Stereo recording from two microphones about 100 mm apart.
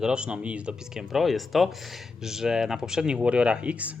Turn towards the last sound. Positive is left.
turn(degrees=-10)  # may be behind; listen again after turning